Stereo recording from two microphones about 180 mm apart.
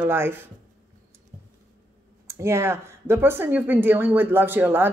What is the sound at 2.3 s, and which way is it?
Speech, 15° right (ahead or behind).